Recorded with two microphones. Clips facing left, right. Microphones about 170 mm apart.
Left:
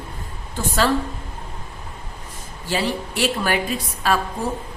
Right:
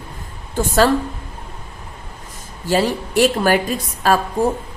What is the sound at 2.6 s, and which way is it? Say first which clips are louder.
Speech: right 6 dB; 45° right (ahead or behind).